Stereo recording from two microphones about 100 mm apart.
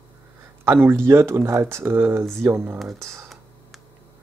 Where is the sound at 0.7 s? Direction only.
25° right (ahead or behind).